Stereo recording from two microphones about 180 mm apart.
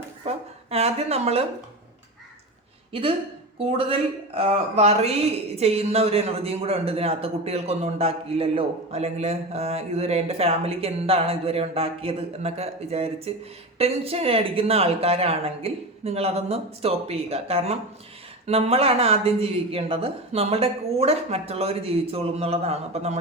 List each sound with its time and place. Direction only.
0.3 s a woman's voice: 35° right (ahead or behind)
2.9 s a woman's voice: 30° right (ahead or behind)